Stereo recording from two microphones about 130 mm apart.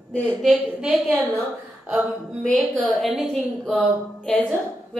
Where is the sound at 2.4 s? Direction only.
5° left (ahead or behind).